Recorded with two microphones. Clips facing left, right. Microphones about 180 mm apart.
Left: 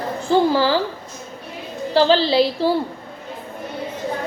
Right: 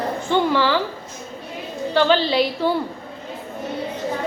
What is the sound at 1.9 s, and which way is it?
Speech, 35° left (ahead or behind).